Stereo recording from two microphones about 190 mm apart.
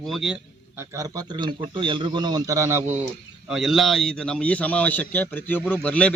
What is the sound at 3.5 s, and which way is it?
A man's voice, centre (ahead or behind).